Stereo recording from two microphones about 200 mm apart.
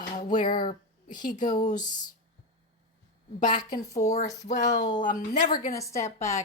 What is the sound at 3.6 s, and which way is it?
Speech, 20° left (ahead or behind).